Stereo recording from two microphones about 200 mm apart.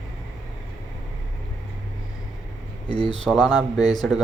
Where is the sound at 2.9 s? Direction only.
25° left (ahead or behind).